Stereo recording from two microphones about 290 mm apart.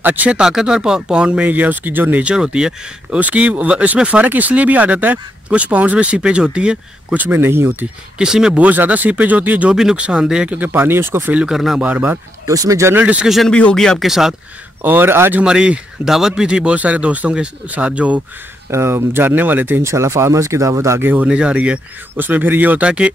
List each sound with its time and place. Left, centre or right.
0.0 s speech: centre